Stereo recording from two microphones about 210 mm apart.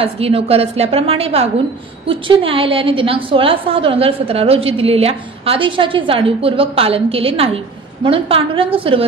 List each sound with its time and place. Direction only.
0.0 s a woman's voice: 30° right (ahead or behind)